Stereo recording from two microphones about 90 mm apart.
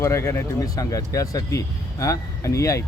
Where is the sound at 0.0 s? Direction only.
35° left (ahead or behind).